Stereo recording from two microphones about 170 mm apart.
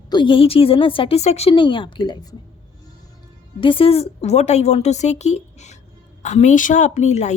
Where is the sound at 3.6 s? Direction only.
30° left (ahead or behind).